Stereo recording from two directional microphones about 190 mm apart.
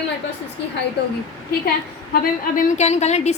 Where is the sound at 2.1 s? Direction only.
40° left (ahead or behind).